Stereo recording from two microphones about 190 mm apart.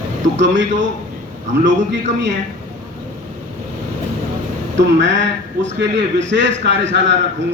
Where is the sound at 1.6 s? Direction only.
70° right (ahead or behind).